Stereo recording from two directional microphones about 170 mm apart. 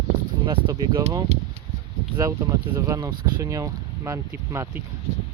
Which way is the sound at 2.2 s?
20° right (ahead or behind).